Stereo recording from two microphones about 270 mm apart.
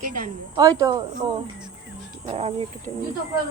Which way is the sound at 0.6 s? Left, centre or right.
Centre.